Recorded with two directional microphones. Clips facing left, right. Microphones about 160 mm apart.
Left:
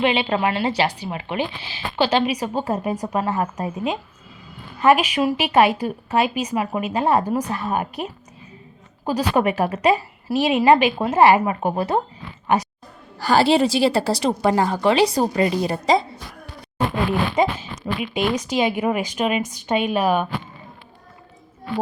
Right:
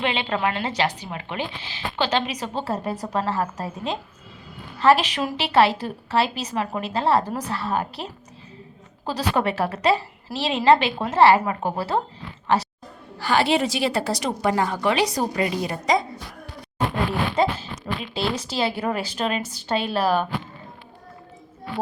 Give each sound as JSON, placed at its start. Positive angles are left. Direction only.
{"t": 0.0, "sound": "speech", "side_deg": 15}
{"t": 13.1, "sound": "a woman's voice", "side_deg": 35}
{"t": 17.3, "sound": "speech", "side_deg": 10}